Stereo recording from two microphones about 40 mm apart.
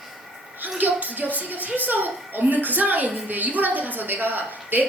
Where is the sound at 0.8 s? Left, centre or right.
Right.